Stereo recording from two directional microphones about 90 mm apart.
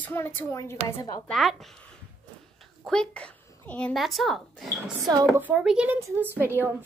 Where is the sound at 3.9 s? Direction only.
Centre (ahead or behind).